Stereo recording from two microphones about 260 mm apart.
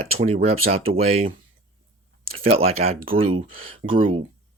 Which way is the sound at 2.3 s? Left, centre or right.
Right.